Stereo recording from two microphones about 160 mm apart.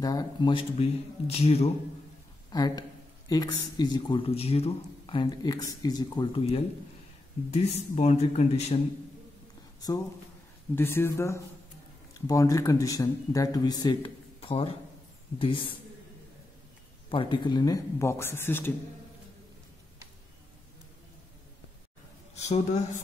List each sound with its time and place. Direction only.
0.0 s speech: 25° left (ahead or behind); by 1.7 s 40° left (ahead or behind)
2.5 s speech: 25° left (ahead or behind)
7.5 s speech: 45° left (ahead or behind)
9.8 s a woman's voice: 20° left (ahead or behind)
17.1 s speech: 30° left (ahead or behind); by 18.7 s 15° left (ahead or behind)
22.3 s speech: 45° left (ahead or behind)